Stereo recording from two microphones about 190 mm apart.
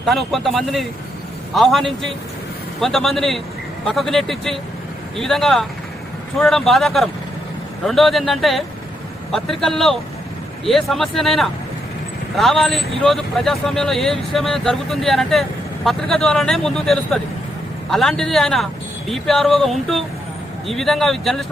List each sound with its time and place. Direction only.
0.0 s speech: centre (ahead or behind)